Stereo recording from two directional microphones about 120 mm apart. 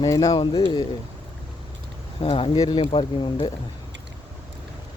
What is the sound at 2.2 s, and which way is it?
Speech, 55° left (ahead or behind).